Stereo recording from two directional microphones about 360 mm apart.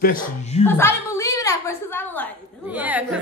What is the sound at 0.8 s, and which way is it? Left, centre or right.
A woman's voice, centre.